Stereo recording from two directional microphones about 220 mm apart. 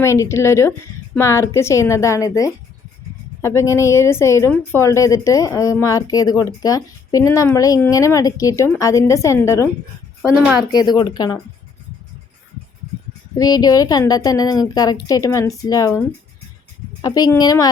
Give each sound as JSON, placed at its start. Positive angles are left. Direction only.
{"t": 0.0, "sound": "a woman's voice", "side_deg": 15}
{"t": 10.2, "sound": "a woman's voice", "side_deg": -5}
{"t": 10.7, "sound": "a woman's voice", "side_deg": 20}
{"t": 13.3, "sound": "a woman's voice", "side_deg": 15}